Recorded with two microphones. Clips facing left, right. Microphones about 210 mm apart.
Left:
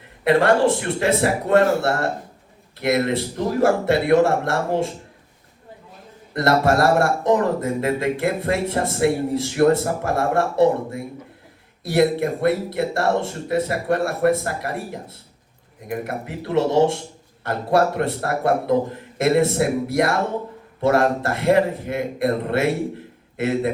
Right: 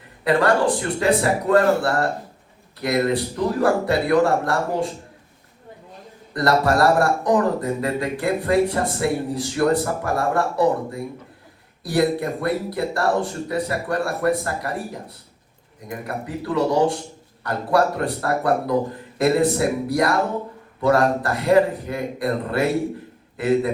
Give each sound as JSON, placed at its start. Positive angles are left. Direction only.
{"t": 0.3, "sound": "a man's voice", "side_deg": 25}
{"t": 6.3, "sound": "a man's voice", "side_deg": 25}